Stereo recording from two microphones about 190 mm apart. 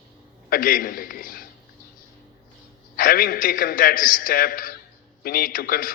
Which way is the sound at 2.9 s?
45° left (ahead or behind).